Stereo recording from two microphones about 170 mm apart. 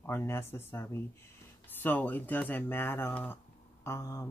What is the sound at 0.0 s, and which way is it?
Speech, 15° left (ahead or behind).